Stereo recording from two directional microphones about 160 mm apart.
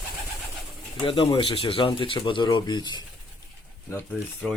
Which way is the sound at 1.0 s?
35° left (ahead or behind).